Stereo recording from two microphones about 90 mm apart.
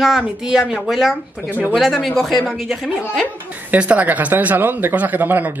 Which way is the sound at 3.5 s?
15° right (ahead or behind).